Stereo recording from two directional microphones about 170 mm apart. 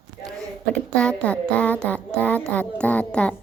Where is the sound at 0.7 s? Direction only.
5° left (ahead or behind).